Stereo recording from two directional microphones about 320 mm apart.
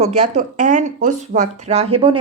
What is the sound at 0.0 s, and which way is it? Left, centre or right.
A woman's voice, right.